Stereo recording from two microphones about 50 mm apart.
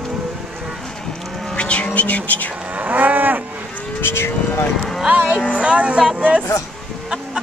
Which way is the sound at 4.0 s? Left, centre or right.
Left.